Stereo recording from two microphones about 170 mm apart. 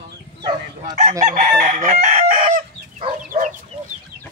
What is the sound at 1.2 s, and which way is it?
Chicken, 45° right (ahead or behind).